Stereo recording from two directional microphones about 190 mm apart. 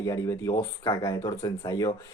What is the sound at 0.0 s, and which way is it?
Speech, 15° left (ahead or behind).